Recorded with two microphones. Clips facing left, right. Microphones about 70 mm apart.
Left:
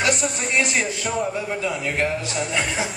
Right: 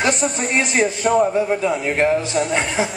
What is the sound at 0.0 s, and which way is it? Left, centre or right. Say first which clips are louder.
A man's voice: right 3 dB; right.